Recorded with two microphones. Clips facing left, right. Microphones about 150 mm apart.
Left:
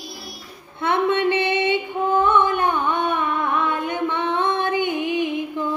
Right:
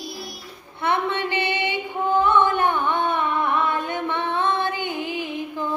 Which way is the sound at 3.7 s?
15° left (ahead or behind).